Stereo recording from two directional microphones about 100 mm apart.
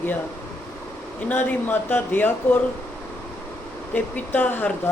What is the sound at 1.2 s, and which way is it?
Speech, 15° left (ahead or behind).